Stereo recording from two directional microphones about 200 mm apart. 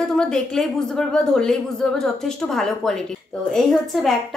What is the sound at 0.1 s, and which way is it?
A woman's voice, 5° left (ahead or behind).